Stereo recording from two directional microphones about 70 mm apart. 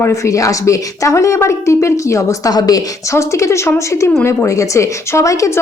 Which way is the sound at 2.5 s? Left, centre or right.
Left.